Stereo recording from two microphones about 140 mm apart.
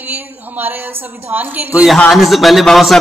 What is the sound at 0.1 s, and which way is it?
Speech, 15° right (ahead or behind).